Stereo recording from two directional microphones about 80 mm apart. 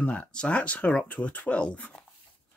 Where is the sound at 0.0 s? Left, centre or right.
Centre.